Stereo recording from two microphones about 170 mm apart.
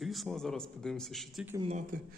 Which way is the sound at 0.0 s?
Centre (ahead or behind).